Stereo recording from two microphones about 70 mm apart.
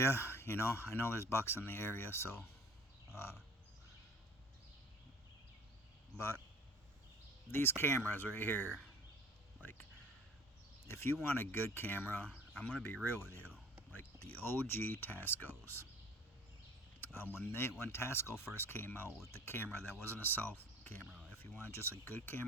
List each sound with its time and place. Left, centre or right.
0.0 s speech: left
7.5 s speech: left
11.0 s speech: left
17.0 s speech: left
21.0 s speech: centre
21.2 s a sound: left
22.0 s speech: left